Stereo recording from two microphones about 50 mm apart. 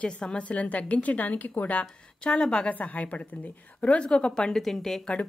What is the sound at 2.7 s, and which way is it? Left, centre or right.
Speech, left.